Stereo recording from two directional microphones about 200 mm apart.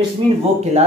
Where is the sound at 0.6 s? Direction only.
35° right (ahead or behind).